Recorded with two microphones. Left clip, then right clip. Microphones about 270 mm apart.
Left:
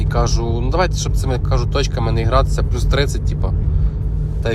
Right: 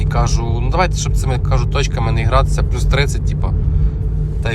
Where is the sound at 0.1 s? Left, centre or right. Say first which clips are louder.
Left 1 dB; centre.